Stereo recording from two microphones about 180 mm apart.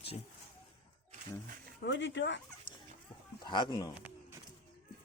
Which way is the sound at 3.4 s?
25° left (ahead or behind).